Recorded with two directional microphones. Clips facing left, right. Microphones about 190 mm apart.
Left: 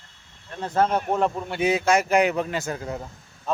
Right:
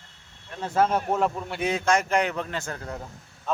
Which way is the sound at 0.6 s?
5° right (ahead or behind).